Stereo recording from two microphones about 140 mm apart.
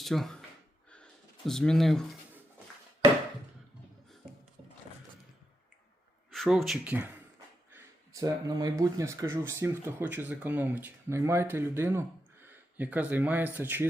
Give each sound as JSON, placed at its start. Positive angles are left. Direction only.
{"t": 0.0, "sound": "speech", "side_deg": 0}
{"t": 1.5, "sound": "speech", "side_deg": 5}
{"t": 6.3, "sound": "speech", "side_deg": 0}
{"t": 7.7, "sound": "speech", "side_deg": -20}